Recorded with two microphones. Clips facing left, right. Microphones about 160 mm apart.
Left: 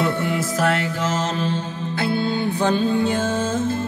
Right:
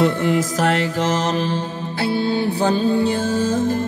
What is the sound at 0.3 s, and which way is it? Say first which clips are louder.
Music: right 3 dB; 45° right (ahead or behind).